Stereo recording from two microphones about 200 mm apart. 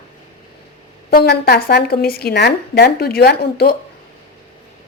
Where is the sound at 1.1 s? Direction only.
50° left (ahead or behind).